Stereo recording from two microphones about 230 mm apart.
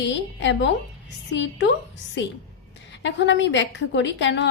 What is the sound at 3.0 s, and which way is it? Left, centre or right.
A woman's voice, left.